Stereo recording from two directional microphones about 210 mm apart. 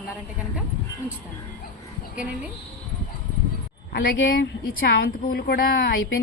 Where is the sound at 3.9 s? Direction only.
65° left (ahead or behind).